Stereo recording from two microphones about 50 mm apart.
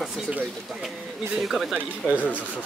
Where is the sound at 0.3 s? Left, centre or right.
Right.